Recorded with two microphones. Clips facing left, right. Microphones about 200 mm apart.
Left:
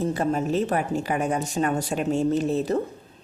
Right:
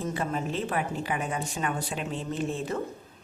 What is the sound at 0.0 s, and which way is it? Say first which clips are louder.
A woman's voice: left 6 dB; 40° left (ahead or behind).